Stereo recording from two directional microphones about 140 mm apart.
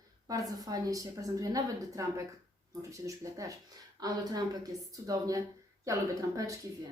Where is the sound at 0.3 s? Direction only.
25° right (ahead or behind).